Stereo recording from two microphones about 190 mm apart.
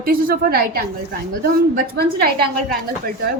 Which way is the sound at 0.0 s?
50° right (ahead or behind).